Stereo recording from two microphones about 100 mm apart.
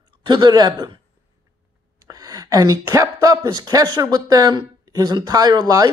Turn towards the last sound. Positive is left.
turn(degrees=-40)  # may be behind; listen again after turning